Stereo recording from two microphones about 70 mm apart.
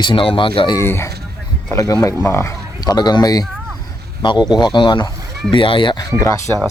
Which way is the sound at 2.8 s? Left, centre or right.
Left.